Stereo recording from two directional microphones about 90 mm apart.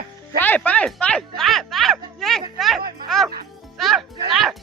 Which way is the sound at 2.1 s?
5° left (ahead or behind).